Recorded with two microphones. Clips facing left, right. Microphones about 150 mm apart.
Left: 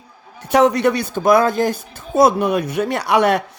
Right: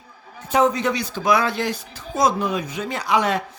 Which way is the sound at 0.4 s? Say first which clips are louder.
Left 5 dB; 70° left (ahead or behind).